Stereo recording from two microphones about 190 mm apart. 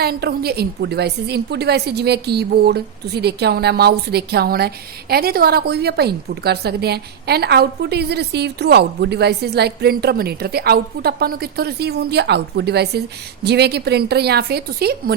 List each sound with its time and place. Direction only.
0.0 s a woman's voice: 55° right (ahead or behind)